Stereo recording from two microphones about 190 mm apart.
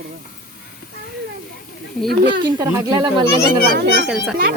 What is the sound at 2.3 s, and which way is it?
Speech, 20° right (ahead or behind).